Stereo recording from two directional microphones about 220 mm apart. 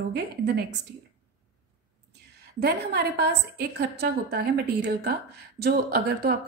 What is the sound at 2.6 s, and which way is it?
A woman's voice, 45° right (ahead or behind).